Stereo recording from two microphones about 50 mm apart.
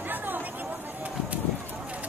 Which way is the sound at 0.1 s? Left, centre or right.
Right.